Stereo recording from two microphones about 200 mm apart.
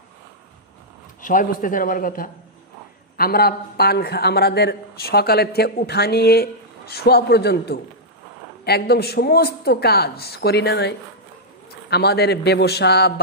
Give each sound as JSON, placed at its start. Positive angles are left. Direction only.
{"t": 1.2, "sound": "a man's voice", "side_deg": 40}